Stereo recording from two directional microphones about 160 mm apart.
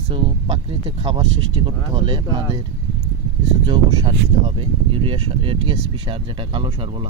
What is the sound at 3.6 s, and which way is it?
Speech, 30° right (ahead or behind).